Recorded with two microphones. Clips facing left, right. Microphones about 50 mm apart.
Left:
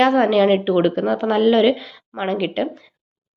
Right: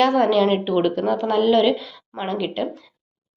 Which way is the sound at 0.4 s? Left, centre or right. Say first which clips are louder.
Left 4 dB; centre.